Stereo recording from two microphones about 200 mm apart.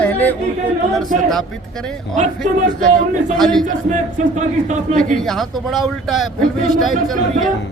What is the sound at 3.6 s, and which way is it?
Speech, 40° right (ahead or behind).